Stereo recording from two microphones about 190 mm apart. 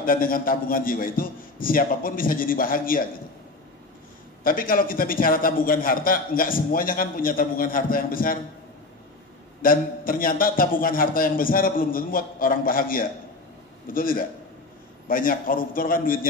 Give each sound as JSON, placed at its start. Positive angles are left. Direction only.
{"t": 0.0, "sound": "a man's voice", "side_deg": 50}
{"t": 4.4, "sound": "a man's voice", "side_deg": 50}
{"t": 9.6, "sound": "a man's voice", "side_deg": 50}